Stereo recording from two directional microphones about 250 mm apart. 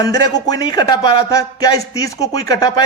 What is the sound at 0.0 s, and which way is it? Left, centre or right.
A man's voice, centre.